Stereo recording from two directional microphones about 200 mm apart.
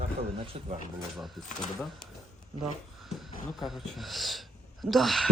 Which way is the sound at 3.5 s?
Centre (ahead or behind).